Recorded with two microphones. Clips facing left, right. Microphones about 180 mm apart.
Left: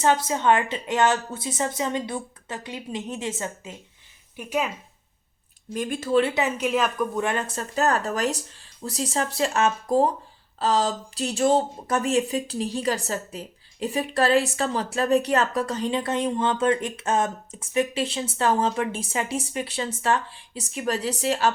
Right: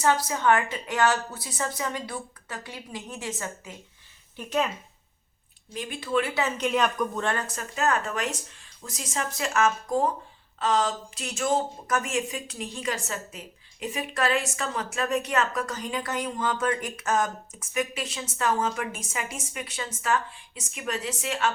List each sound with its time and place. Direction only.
0.0 s a woman's voice: 25° left (ahead or behind)
4.4 s speech: 10° left (ahead or behind)
5.7 s speech: 50° left (ahead or behind)
6.6 s speech: centre (ahead or behind)
7.3 s speech: 25° left (ahead or behind)